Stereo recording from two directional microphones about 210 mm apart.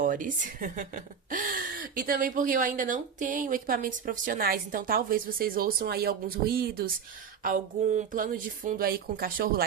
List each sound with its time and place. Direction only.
0.0 s speech: 40° right (ahead or behind)